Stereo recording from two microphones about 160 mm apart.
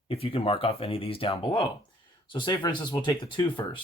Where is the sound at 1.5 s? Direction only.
20° left (ahead or behind).